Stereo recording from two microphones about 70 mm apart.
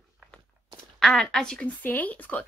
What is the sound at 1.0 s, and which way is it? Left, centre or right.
Speech, centre.